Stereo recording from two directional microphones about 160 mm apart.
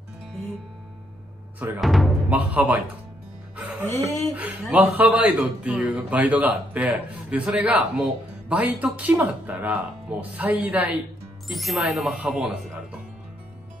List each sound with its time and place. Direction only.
1.6 s a man's voice: centre (ahead or behind)
3.8 s speech: 15° left (ahead or behind)
4.4 s a man's voice: 10° right (ahead or behind)